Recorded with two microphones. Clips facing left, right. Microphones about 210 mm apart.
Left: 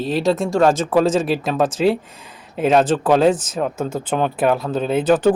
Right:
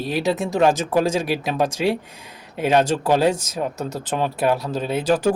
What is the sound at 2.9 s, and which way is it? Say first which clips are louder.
Speech: left 4 dB; 10° right (ahead or behind).